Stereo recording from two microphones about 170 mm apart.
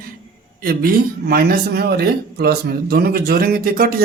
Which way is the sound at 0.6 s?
60° right (ahead or behind).